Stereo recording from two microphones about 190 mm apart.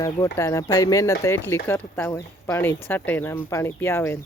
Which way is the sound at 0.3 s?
15° left (ahead or behind).